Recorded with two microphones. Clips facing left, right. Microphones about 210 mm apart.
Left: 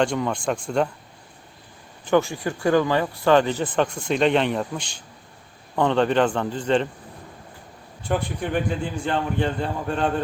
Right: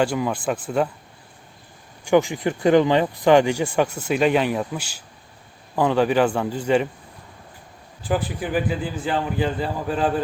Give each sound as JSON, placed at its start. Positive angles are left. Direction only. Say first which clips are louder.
{"t": 0.0, "sound": "a man's voice", "louder": "right 1 dB", "side_deg": -5}
{"t": 2.0, "sound": "speech", "louder": "right 2 dB", "side_deg": -15}
{"t": 8.0, "sound": "a man's voice", "louder": "right 1 dB", "side_deg": -5}